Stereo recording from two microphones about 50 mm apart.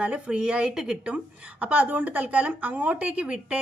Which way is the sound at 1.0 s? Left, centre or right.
Right.